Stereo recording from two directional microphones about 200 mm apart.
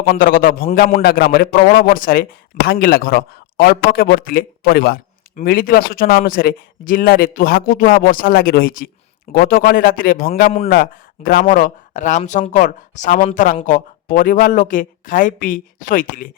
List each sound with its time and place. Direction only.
0.0 s a man's voice: 45° left (ahead or behind)